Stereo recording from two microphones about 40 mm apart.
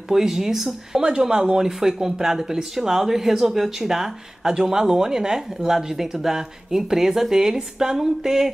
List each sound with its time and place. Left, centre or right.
0.1 s speech: centre
1.0 s speech: centre